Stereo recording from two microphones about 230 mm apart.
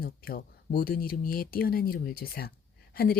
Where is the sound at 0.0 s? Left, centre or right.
Left.